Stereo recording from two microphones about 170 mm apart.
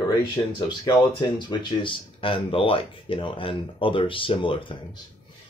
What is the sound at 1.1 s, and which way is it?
Speech, 30° left (ahead or behind).